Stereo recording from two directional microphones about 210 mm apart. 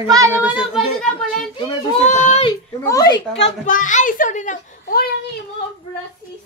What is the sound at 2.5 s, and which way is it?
Speech, 15° left (ahead or behind).